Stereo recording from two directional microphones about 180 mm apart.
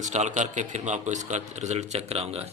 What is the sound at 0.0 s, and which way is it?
Speech, 40° right (ahead or behind).